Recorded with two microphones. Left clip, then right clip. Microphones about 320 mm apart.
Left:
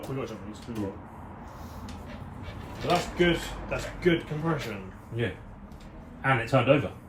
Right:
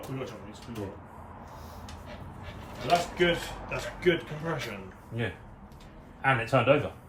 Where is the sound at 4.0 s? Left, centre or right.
Centre.